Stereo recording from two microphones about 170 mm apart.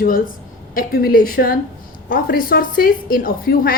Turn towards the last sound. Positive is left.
turn(degrees=55)  # may be behind; listen again after turning